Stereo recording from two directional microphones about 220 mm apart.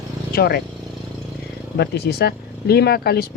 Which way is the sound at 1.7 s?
50° left (ahead or behind).